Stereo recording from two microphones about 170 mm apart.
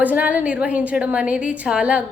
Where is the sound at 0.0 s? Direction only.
10° right (ahead or behind).